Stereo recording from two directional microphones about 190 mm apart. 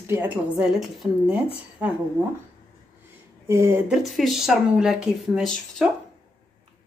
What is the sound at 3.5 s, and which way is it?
Speech, 15° right (ahead or behind).